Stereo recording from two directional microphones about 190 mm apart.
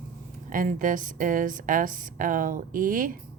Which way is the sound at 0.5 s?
45° right (ahead or behind).